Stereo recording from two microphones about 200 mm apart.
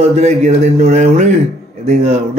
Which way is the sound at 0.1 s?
35° right (ahead or behind).